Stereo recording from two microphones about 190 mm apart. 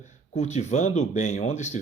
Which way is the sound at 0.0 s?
35° left (ahead or behind).